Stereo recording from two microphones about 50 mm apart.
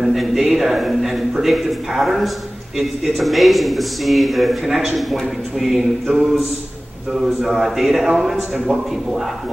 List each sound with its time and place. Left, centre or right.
0.0 s speech: centre
6.0 s speech: centre
7.2 s speech: centre